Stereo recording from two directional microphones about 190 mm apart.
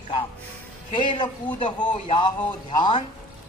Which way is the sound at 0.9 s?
25° left (ahead or behind).